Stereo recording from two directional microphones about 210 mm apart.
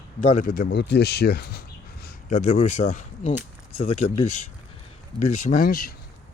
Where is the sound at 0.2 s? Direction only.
40° left (ahead or behind).